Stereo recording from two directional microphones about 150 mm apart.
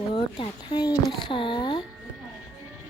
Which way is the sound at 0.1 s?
35° left (ahead or behind).